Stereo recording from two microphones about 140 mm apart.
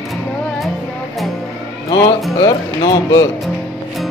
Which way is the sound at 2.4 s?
25° left (ahead or behind).